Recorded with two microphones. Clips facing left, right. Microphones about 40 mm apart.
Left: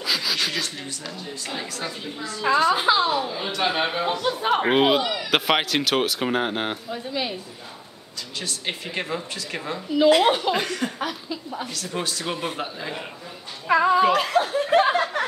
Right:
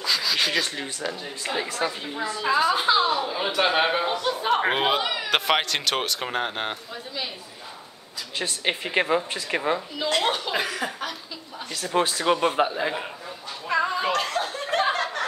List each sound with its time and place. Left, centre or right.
0.0 s rub: centre
0.4 s speech: right
2.4 s speech: centre
3.3 s a man's voice: centre
4.0 s speech: centre
8.4 s speech: right
9.9 s speech: centre
10.5 s speech: centre
11.0 s speech: centre
11.7 s speech: right
13.7 s a sound: centre